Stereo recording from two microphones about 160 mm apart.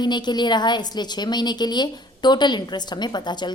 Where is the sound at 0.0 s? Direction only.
25° left (ahead or behind).